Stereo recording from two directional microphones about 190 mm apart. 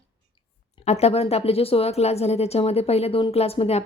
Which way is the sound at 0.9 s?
35° left (ahead or behind).